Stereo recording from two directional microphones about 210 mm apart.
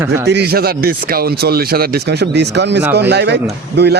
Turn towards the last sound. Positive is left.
turn(degrees=-55)  # may be behind; listen again after turning